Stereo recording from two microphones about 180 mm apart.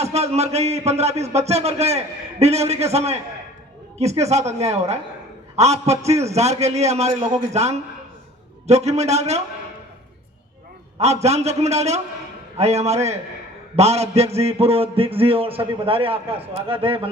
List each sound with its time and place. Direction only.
0.0 s a man's voice: 35° right (ahead or behind)
10.9 s a man's voice: 35° right (ahead or behind)